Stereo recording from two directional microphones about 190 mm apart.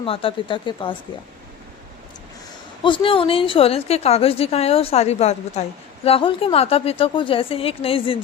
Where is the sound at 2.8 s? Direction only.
25° left (ahead or behind).